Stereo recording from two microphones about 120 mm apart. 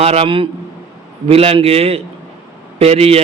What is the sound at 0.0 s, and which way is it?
A man's voice, 55° right (ahead or behind).